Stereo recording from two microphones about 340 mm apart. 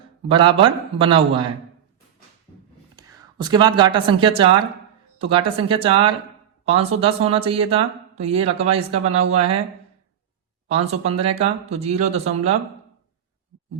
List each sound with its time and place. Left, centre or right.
0.3 s speech: centre
2.9 s speech: centre
10.7 s speech: centre